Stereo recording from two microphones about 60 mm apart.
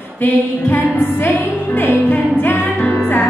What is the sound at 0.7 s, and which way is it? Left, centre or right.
Music, left.